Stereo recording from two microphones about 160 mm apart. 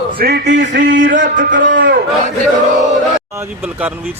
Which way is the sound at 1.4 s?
55° right (ahead or behind).